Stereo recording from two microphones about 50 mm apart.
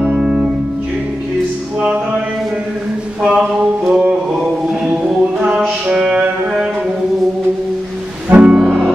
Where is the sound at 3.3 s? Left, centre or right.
Centre.